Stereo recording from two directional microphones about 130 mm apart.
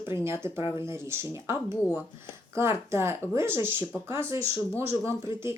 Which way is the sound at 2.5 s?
20° right (ahead or behind).